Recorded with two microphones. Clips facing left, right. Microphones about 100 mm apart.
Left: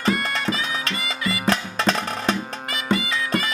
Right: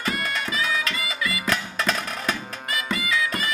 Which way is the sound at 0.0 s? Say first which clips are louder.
Left 5 dB; 30° left (ahead or behind).